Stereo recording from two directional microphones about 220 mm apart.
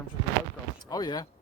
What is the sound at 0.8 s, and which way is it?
Speech, 20° left (ahead or behind).